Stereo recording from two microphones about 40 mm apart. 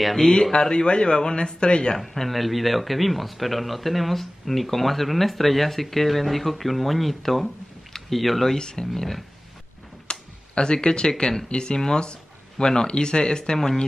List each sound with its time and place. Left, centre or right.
0.0 s speech: centre
0.3 s speech: centre
2.0 s speech: centre
8.5 s speech: centre
8.9 s speech: centre
10.0 s speech: left